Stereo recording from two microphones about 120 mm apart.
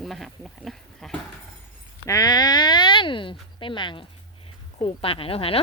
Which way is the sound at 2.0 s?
25° left (ahead or behind).